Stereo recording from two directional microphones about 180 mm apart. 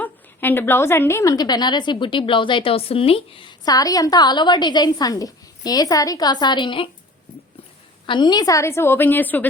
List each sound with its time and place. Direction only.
0.0 s a woman's voice: 10° left (ahead or behind); by 6.9 s 30° left (ahead or behind)
8.0 s a woman's voice: 25° left (ahead or behind); by 9.5 s 10° left (ahead or behind)